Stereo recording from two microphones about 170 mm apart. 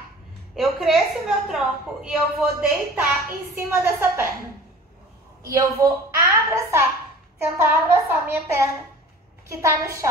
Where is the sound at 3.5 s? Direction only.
10° right (ahead or behind).